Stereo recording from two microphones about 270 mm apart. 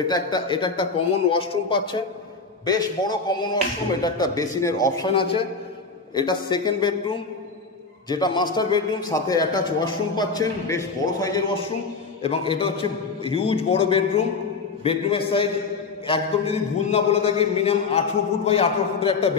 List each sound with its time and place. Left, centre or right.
0.0 s a man's voice: centre